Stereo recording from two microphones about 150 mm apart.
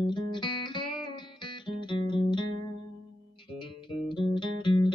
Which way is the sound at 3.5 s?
35° left (ahead or behind).